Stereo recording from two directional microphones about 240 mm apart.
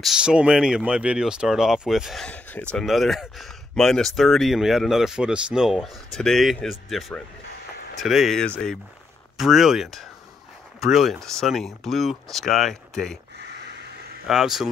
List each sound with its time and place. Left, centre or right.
0.0 s speech: centre
14.2 s speech: centre